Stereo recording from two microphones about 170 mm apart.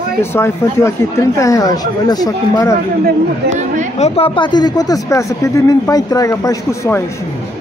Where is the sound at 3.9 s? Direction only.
40° left (ahead or behind); by 7.0 s 15° left (ahead or behind).